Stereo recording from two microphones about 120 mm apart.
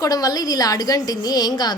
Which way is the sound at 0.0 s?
30° left (ahead or behind).